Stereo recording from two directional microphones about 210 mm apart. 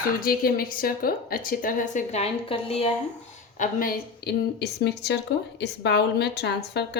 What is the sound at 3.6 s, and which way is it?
A woman's voice, 40° left (ahead or behind).